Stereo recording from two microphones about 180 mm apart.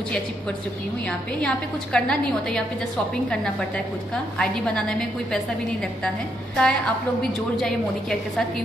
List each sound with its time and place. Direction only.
1.4 s a woman's voice: 5° left (ahead or behind)